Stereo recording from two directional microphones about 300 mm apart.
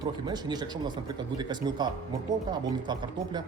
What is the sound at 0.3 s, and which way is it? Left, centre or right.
Speech, centre.